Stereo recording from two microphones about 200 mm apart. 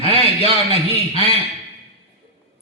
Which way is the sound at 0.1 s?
30° right (ahead or behind).